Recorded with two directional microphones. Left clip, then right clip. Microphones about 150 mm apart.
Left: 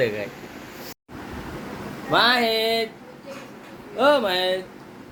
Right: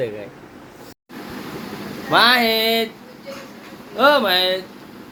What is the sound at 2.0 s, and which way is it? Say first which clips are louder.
Speech: right 4 dB; 20° right (ahead or behind).